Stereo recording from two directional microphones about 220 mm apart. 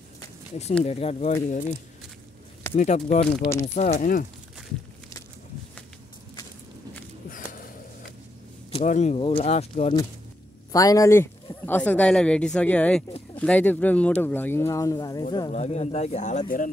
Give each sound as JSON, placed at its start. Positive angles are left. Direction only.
{"t": 0.8, "sound": "speech", "side_deg": 25}
{"t": 7.2, "sound": "a sound", "side_deg": 40}
{"t": 8.7, "sound": "speech", "side_deg": 30}
{"t": 10.7, "sound": "speech", "side_deg": 15}
{"t": 15.5, "sound": "speech", "side_deg": 30}